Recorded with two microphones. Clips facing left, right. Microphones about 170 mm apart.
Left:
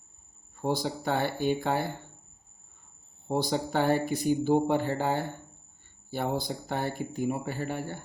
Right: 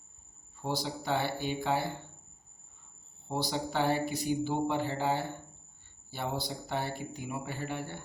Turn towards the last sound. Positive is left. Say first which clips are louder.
# left 4 dB
turn(degrees=45)  # may be behind; listen again after turning